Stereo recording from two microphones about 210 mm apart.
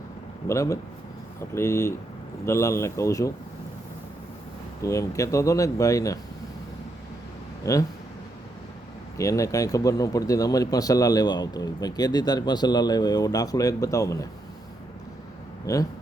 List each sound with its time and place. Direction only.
0.4 s speech: 15° left (ahead or behind)
4.8 s speech: 15° left (ahead or behind)
7.6 s speech: 15° left (ahead or behind)
9.1 s speech: 15° left (ahead or behind)
15.6 s speech: 15° left (ahead or behind)